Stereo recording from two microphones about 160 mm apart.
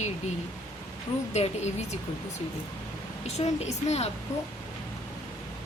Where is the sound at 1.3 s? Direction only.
45° left (ahead or behind).